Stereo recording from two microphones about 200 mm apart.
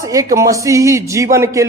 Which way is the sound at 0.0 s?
15° right (ahead or behind).